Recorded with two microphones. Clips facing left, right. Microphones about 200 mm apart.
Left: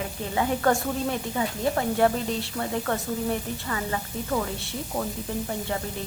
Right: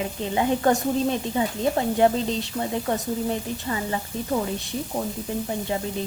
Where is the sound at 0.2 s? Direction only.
20° right (ahead or behind).